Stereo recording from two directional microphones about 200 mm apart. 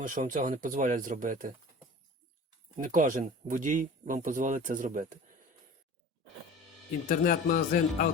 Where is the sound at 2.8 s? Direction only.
40° right (ahead or behind).